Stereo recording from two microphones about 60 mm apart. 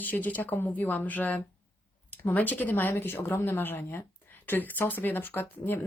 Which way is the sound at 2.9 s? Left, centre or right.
Left.